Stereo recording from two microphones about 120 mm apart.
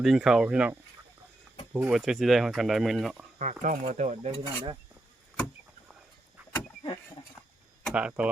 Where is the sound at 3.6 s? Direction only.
90° right; by 4.5 s 65° right (ahead or behind).